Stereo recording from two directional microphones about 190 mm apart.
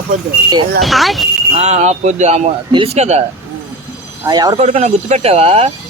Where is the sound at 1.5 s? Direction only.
35° right (ahead or behind).